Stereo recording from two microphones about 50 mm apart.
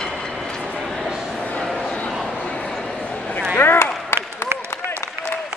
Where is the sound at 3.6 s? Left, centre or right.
Left.